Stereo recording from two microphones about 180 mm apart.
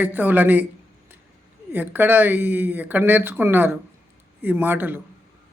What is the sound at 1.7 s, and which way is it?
Speech, 10° right (ahead or behind).